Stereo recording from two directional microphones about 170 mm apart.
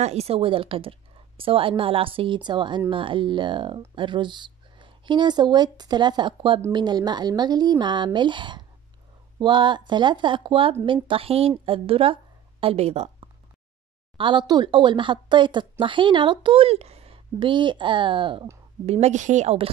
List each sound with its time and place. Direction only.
0.0 s a woman's voice: 40° right (ahead or behind)
14.1 s speech: 30° right (ahead or behind)
18.9 s a woman's voice: 40° right (ahead or behind)